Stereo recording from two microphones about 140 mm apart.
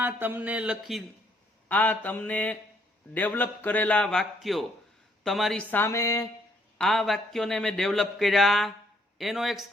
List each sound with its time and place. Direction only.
0.0 s speech: 15° right (ahead or behind)
1.6 s a man's voice: 10° left (ahead or behind)
5.7 s a sound: 20° left (ahead or behind)
6.7 s a man's voice: centre (ahead or behind)